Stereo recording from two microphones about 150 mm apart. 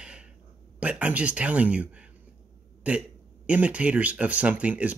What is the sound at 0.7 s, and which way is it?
A man's voice, 10° right (ahead or behind).